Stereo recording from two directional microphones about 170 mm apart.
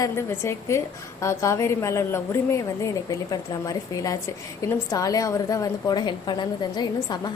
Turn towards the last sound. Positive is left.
turn(degrees=25)  # may be behind; listen again after turning